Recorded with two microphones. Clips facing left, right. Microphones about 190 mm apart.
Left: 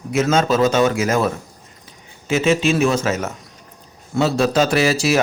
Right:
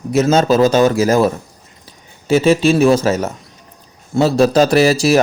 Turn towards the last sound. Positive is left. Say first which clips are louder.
# right 5 dB
turn(degrees=-35)  # may be behind; listen again after turning